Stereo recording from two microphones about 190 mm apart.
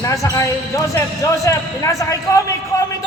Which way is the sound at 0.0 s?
15° left (ahead or behind).